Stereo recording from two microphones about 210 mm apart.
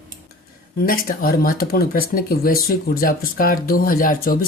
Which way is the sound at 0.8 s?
45° left (ahead or behind).